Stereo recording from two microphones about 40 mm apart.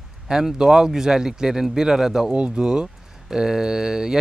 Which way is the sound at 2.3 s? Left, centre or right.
Right.